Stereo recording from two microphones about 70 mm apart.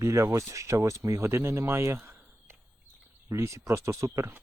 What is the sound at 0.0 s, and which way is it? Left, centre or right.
Speech, right.